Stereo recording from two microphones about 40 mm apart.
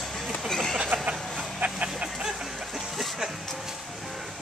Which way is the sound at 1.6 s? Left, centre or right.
Right.